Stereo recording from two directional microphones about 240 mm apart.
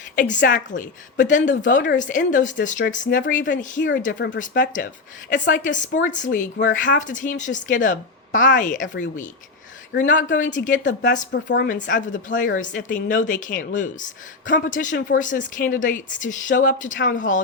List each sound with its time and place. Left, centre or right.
0.3 s a woman's voice: left
11.3 s a woman's voice: left
11.7 s a woman's voice: left